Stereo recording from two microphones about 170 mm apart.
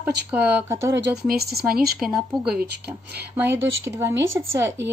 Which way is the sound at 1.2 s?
65° right (ahead or behind).